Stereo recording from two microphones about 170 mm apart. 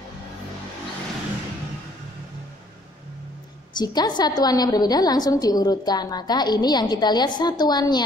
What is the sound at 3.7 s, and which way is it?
A woman's voice, 25° left (ahead or behind).